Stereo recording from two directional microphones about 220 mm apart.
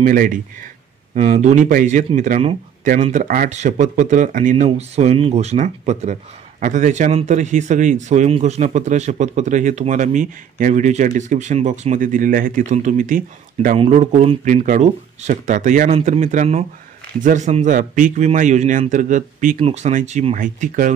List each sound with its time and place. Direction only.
0.0 s a man's voice: 40° right (ahead or behind)